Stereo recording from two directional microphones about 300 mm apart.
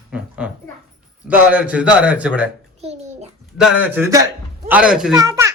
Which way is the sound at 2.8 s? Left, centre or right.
Right.